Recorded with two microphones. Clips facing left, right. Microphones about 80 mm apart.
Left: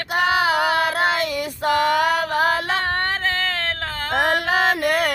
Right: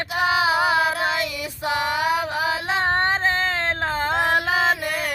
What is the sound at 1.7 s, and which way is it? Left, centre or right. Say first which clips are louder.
Female singing: left 4 dB; left.